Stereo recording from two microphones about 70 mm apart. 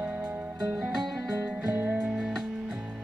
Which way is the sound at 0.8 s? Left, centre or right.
Centre.